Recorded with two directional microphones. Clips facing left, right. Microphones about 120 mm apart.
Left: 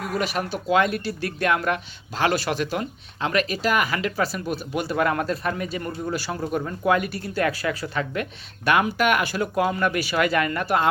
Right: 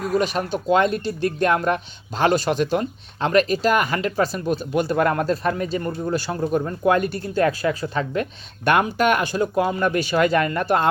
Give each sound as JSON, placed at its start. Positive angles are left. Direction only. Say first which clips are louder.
{"t": 0.2, "sound": "speech", "louder": "right 4 dB", "side_deg": -30}
{"t": 4.9, "sound": "speech", "louder": "even", "side_deg": -35}
{"t": 7.3, "sound": "speech", "louder": "right 4 dB", "side_deg": -25}